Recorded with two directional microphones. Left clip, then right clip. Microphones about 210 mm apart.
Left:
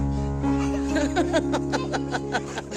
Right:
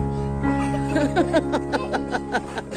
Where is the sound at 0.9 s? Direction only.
5° right (ahead or behind).